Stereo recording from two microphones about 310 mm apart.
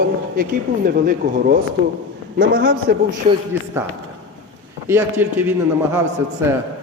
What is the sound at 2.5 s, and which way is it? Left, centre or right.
Speech, right.